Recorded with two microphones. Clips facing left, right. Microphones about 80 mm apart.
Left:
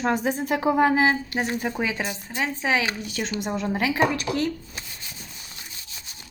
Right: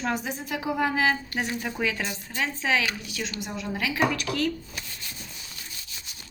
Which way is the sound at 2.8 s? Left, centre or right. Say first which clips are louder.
Left 3 dB; left.